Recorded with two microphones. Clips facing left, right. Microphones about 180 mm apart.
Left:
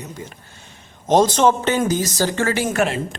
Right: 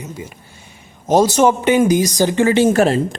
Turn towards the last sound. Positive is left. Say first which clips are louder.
# right 7 dB
turn(degrees=-35)  # may be behind; listen again after turning